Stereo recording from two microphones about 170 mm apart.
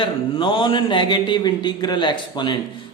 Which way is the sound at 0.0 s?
30° left (ahead or behind).